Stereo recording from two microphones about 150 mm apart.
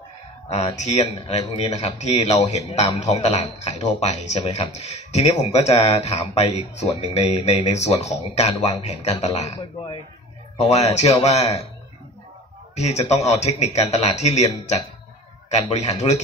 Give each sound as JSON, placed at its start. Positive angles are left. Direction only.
{"t": 0.5, "sound": "speech", "side_deg": 45}
{"t": 9.6, "sound": "speech", "side_deg": 30}
{"t": 10.6, "sound": "speech", "side_deg": 45}
{"t": 12.7, "sound": "speech", "side_deg": 50}